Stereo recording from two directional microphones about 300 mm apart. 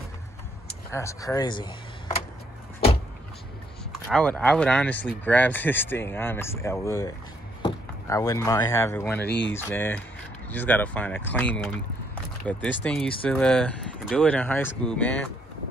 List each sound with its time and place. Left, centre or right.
0.9 s speech: centre
4.1 s speech: centre
9.2 s speech: left
9.5 s speech: centre